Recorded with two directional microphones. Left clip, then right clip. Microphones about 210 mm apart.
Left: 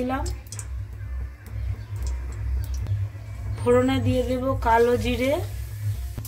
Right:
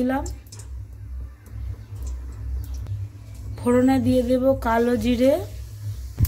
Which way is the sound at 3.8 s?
30° right (ahead or behind).